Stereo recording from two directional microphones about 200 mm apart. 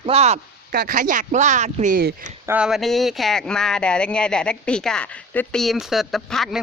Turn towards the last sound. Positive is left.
turn(degrees=0)  # may be behind; listen again after turning